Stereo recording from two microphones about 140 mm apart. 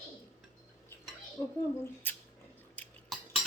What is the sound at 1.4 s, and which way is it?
Speech, 20° left (ahead or behind).